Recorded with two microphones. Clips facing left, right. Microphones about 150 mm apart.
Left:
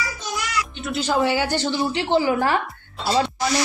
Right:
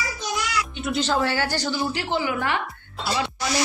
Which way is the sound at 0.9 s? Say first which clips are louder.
Left 3 dB; 10° left (ahead or behind).